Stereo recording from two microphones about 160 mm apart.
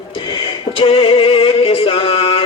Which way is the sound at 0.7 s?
35° left (ahead or behind).